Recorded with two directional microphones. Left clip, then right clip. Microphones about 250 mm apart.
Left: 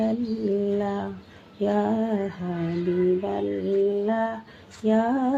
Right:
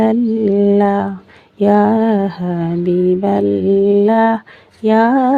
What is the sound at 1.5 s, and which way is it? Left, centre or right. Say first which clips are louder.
Female singing: right 12 dB; right.